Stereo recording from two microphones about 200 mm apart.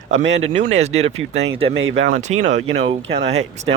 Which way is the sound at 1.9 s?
70° right (ahead or behind).